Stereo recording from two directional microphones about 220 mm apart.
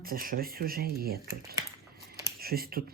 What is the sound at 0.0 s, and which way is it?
Speech, 40° right (ahead or behind).